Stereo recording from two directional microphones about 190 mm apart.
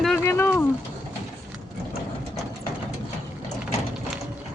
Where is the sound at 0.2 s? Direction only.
15° left (ahead or behind).